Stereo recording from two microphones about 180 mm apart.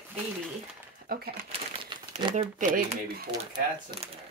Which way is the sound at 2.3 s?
40° right (ahead or behind).